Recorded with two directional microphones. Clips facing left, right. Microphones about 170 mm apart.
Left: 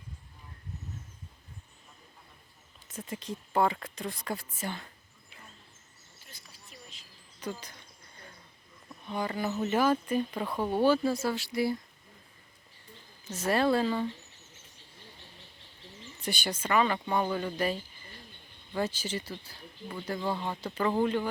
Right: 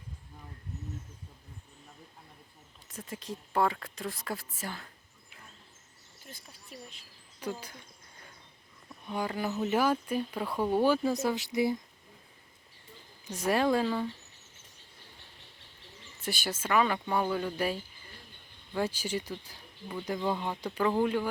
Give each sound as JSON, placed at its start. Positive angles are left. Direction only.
{"t": 2.9, "sound": "speech", "side_deg": 0}
{"t": 6.3, "sound": "a sound", "side_deg": -55}
{"t": 7.3, "sound": "speech", "side_deg": -10}
{"t": 9.0, "sound": "speech", "side_deg": -10}
{"t": 13.2, "sound": "speech", "side_deg": -15}
{"t": 16.2, "sound": "speech", "side_deg": 0}
{"t": 18.8, "sound": "speech", "side_deg": -10}
{"t": 20.7, "sound": "speech", "side_deg": 0}